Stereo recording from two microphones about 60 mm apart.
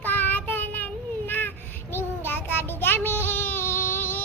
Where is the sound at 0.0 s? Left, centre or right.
Left.